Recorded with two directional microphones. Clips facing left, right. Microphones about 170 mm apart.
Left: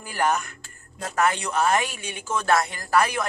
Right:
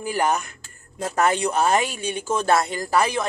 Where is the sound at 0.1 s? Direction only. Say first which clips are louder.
Right 1 dB; 25° right (ahead or behind).